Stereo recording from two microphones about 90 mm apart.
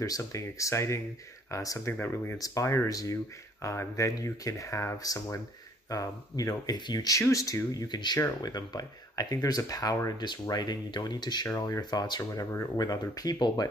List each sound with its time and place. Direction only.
0.0 s speech: 40° left (ahead or behind)
7.2 s speech: 35° left (ahead or behind); by 11.4 s 55° left (ahead or behind)
11.5 s speech: 40° left (ahead or behind)